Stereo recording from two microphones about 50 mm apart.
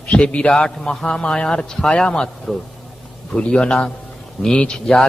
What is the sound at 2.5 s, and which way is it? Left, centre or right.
Speech, centre.